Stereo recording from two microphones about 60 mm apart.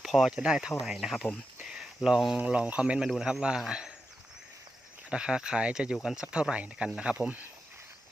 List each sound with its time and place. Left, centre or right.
0.0 s a sound: centre
0.3 s speech: centre
2.4 s speech: right
3.1 s speech: centre
5.0 s speech: centre